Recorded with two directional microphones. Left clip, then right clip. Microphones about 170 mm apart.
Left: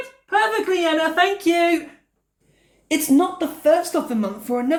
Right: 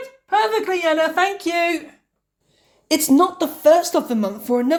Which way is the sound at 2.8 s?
40° right (ahead or behind).